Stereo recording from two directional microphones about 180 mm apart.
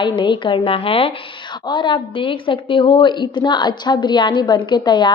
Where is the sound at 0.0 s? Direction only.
25° left (ahead or behind).